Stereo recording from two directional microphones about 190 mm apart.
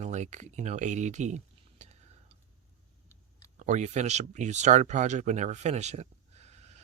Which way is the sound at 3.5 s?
40° right (ahead or behind).